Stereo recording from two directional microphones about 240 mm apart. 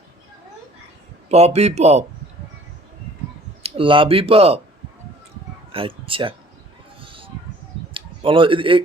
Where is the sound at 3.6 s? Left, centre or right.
Right.